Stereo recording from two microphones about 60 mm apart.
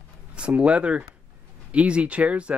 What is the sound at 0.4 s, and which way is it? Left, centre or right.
Speech, centre.